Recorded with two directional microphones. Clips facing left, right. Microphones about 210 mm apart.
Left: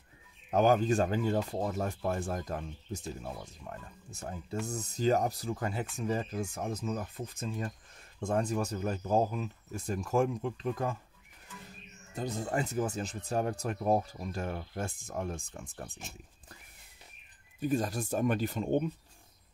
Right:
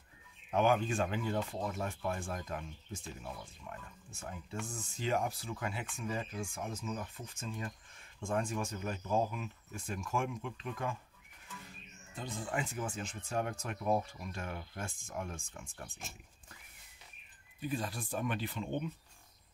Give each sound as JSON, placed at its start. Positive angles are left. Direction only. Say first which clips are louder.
{"t": 0.5, "sound": "speech", "louder": "left 5 dB", "side_deg": 40}
{"t": 12.1, "sound": "speech", "louder": "left 6 dB", "side_deg": 40}
{"t": 17.6, "sound": "speech", "louder": "left 7 dB", "side_deg": 45}